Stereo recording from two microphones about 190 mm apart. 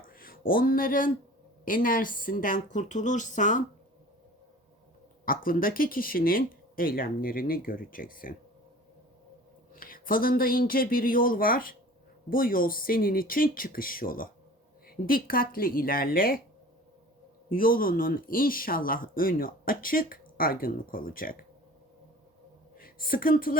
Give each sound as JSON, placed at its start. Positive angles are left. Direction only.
{"t": 0.0, "sound": "a sound", "side_deg": 50}
{"t": 1.6, "sound": "speech", "side_deg": 45}
{"t": 5.2, "sound": "speech", "side_deg": 50}
{"t": 9.7, "sound": "speech", "side_deg": 50}
{"t": 17.5, "sound": "speech", "side_deg": 50}
{"t": 22.8, "sound": "a woman's voice", "side_deg": 50}